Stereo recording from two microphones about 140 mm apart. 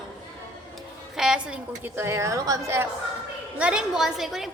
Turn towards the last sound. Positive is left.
turn(degrees=0)  # may be behind; listen again after turning